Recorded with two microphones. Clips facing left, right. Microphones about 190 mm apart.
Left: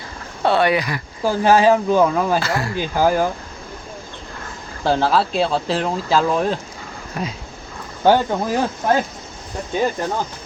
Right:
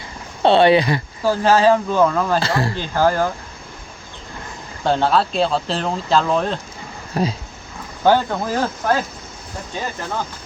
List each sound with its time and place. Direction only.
0.4 s speech: 25° right (ahead or behind)
1.2 s speech: 15° left (ahead or behind)
2.4 s speech: 30° right (ahead or behind)
2.7 s speech: 10° left (ahead or behind)
4.8 s speech: 5° left (ahead or behind)
7.2 s speech: 35° right (ahead or behind)
8.0 s speech: 15° left (ahead or behind)